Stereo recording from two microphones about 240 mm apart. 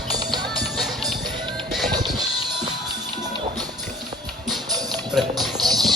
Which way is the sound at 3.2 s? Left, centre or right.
Centre.